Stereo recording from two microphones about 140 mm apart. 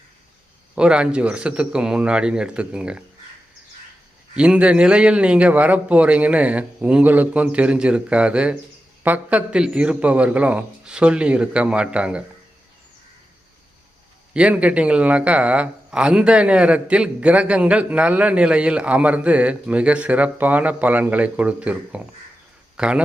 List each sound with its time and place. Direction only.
0.8 s speech: 5° right (ahead or behind)
4.4 s speech: 10° right (ahead or behind)
14.3 s speech: 10° right (ahead or behind)